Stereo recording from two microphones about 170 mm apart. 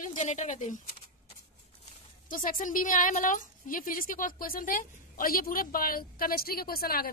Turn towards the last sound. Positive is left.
turn(degrees=60)  # may be behind; listen again after turning